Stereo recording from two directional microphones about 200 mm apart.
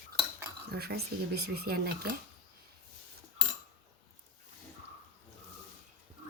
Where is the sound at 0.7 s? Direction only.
50° right (ahead or behind).